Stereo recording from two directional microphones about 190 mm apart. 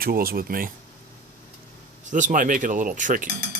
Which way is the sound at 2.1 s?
40° right (ahead or behind).